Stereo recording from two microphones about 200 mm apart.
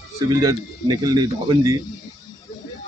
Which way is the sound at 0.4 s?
20° right (ahead or behind).